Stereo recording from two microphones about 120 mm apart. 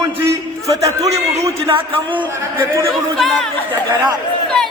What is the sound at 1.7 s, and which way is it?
Speech, 45° right (ahead or behind).